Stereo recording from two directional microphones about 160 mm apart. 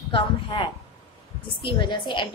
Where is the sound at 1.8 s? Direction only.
30° left (ahead or behind).